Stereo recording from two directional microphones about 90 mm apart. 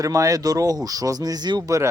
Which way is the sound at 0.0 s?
40° right (ahead or behind).